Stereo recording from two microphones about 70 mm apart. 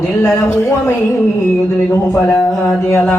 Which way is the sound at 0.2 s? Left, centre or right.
Left.